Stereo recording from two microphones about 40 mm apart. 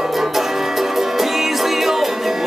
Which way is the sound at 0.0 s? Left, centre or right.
Centre.